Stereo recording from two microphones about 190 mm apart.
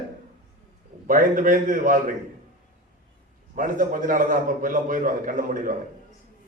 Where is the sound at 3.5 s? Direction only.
45° right (ahead or behind).